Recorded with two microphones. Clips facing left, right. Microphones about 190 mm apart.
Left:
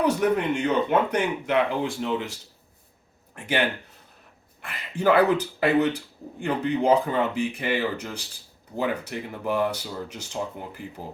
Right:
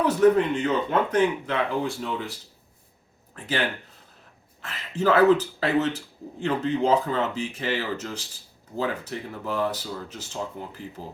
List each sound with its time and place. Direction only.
0.0 s speech: 15° left (ahead or behind)
3.3 s speech: 15° left (ahead or behind)
4.6 s speech: 15° left (ahead or behind)